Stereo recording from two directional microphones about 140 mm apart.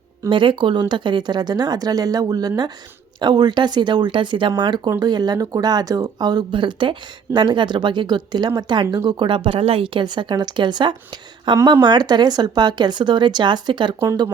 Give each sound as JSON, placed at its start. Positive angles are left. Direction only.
{"t": 0.3, "sound": "speech", "side_deg": -35}
{"t": 14.0, "sound": "speech", "side_deg": -20}